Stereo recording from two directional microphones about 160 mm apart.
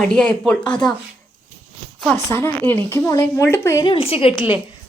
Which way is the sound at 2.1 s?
15° left (ahead or behind).